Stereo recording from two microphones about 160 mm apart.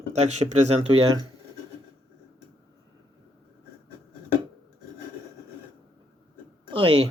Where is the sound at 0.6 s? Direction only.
40° right (ahead or behind).